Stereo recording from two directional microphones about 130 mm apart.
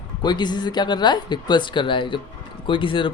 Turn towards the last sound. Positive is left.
turn(degrees=40)  # may be behind; listen again after turning